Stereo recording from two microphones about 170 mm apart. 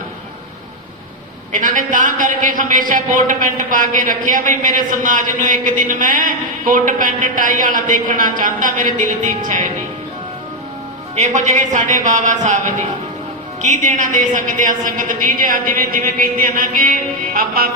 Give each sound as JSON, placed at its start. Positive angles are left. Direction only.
{"t": 1.5, "sound": "a man's voice", "side_deg": -50}
{"t": 11.1, "sound": "a man's voice", "side_deg": -45}